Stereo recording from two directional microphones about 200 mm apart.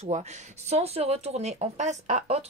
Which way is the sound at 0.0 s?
35° right (ahead or behind).